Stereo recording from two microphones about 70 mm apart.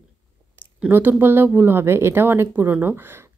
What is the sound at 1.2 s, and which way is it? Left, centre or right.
A woman's voice, right.